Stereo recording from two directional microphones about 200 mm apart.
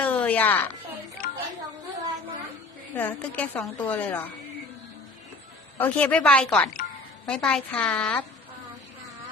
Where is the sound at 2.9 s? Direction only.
10° left (ahead or behind).